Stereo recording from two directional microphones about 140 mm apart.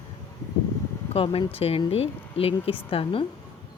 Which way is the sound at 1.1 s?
40° left (ahead or behind).